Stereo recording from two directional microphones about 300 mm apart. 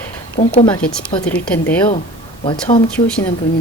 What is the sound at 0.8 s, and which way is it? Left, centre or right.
Speech, centre.